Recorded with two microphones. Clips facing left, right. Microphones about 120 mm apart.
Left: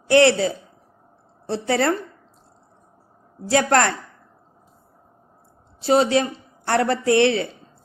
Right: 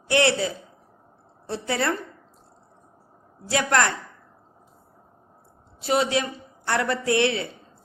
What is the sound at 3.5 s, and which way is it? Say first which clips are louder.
Speech: left 4 dB; 35° left (ahead or behind).